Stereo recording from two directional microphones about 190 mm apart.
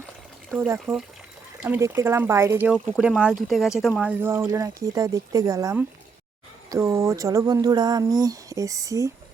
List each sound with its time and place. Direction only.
0.5 s speech: 10° right (ahead or behind)